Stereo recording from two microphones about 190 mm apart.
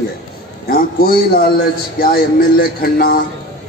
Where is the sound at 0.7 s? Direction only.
50° left (ahead or behind).